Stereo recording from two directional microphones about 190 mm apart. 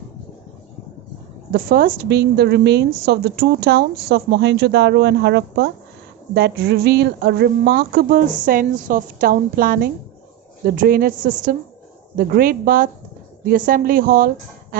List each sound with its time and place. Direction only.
1.5 s a woman's voice: 50° right (ahead or behind)
12.1 s a woman's voice: 50° right (ahead or behind)